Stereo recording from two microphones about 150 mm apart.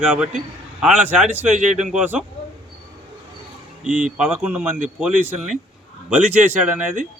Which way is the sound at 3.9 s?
55° right (ahead or behind).